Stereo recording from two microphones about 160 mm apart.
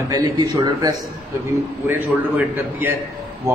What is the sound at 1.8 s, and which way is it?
A man's voice, 10° right (ahead or behind).